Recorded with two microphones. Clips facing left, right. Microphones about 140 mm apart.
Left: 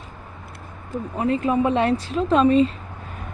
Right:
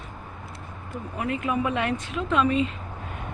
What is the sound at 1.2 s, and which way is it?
Speech, 30° left (ahead or behind).